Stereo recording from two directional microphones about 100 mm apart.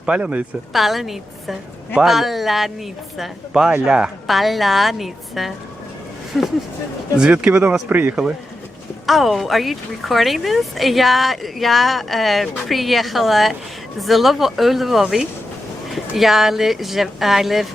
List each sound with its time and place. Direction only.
0.0 s speech: 10° right (ahead or behind)
0.7 s speech: centre (ahead or behind)
7.2 s speech: 10° right (ahead or behind)
7.5 s speech: 20° right (ahead or behind)
9.0 s speech: centre (ahead or behind)